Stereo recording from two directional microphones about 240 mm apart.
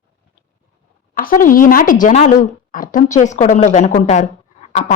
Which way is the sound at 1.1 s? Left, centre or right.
Left.